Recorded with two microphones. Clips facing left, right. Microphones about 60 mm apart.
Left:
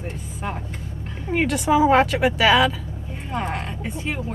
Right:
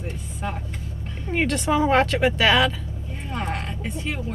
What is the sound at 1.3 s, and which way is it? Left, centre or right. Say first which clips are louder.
A woman's voice: left 3 dB; centre.